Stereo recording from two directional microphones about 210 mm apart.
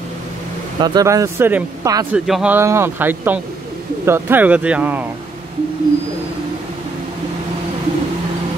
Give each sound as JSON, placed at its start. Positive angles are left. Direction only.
{"t": 0.7, "sound": "speech", "side_deg": -20}
{"t": 2.1, "sound": "speech", "side_deg": -5}